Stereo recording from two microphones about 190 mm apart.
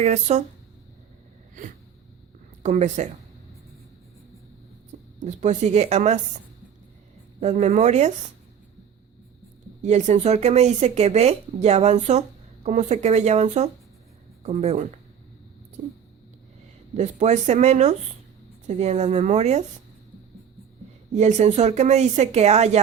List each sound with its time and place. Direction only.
0.0 s speech: 35° right (ahead or behind)
2.6 s speech: 35° right (ahead or behind)
5.2 s speech: 40° right (ahead or behind)
7.3 s speech: 35° right (ahead or behind)
9.8 s speech: 35° right (ahead or behind)
16.9 s speech: 35° right (ahead or behind)
21.1 s speech: 35° right (ahead or behind)